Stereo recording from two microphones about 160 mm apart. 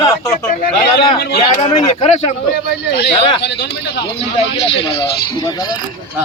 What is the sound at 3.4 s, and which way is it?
Speech, 90° left.